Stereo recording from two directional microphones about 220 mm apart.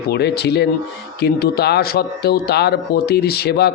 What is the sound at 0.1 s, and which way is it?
Speech, 50° left (ahead or behind).